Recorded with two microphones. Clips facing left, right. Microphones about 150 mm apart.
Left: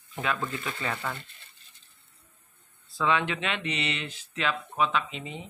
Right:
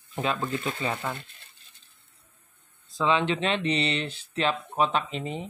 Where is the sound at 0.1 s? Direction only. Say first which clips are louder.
Right 3 dB; 25° right (ahead or behind).